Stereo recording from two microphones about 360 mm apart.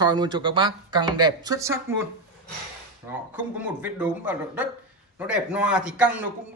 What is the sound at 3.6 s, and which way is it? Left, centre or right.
Speech, centre.